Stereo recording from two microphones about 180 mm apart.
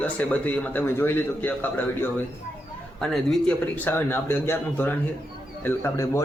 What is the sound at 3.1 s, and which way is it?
A man's voice, 5° left (ahead or behind).